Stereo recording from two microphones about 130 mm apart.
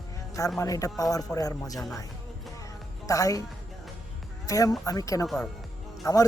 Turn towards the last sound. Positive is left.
turn(degrees=25)  # may be behind; listen again after turning